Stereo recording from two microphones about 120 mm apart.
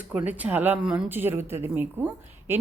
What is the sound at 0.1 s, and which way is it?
A woman's voice, 15° right (ahead or behind).